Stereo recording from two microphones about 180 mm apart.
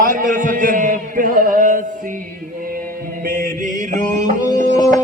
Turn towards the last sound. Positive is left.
turn(degrees=20)  # may be behind; listen again after turning